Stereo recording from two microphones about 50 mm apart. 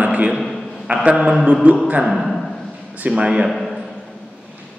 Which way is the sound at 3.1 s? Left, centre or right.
Right.